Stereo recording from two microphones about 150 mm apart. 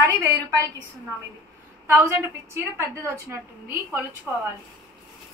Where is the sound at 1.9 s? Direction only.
20° right (ahead or behind).